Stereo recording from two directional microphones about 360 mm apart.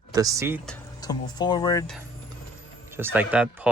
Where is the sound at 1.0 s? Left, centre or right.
Centre.